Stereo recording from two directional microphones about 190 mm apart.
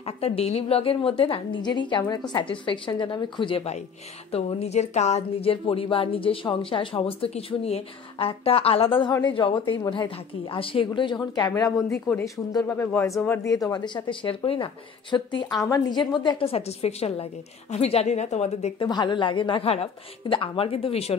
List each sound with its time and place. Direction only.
0.0 s speech: 30° left (ahead or behind)
18.9 s speech: 25° left (ahead or behind)